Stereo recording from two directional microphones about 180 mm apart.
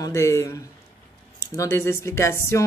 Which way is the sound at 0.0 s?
15° left (ahead or behind).